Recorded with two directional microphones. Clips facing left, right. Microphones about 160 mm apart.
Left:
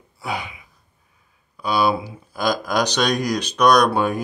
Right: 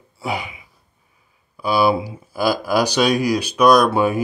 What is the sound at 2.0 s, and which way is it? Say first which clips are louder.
Speech: right 3 dB; 5° right (ahead or behind).